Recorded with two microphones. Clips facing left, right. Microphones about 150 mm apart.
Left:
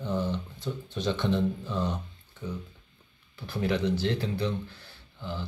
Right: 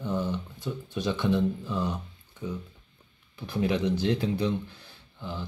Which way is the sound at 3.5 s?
15° right (ahead or behind).